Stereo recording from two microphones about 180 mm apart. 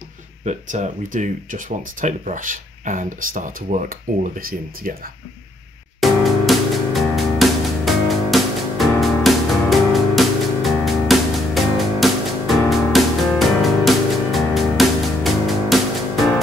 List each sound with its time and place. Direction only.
0.5 s speech: 40° right (ahead or behind)
5.9 s music: centre (ahead or behind)